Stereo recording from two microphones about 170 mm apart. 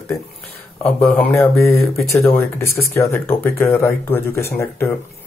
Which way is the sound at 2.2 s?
15° left (ahead or behind).